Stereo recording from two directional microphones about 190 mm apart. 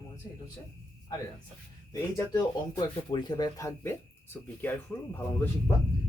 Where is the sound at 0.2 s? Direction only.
20° left (ahead or behind).